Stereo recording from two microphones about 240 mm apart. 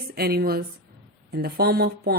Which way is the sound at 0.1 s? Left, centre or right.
Right.